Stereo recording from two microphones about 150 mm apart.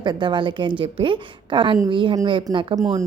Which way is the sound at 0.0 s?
30° right (ahead or behind).